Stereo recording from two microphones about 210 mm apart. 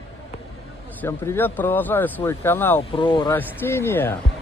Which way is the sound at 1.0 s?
10° left (ahead or behind).